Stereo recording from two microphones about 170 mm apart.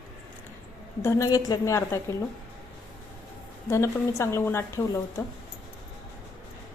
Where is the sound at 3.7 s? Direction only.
15° left (ahead or behind).